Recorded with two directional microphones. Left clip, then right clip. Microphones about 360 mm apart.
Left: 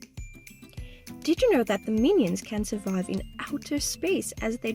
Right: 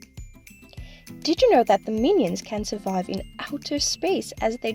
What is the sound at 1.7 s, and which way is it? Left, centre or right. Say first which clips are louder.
Speech: right 7 dB; right.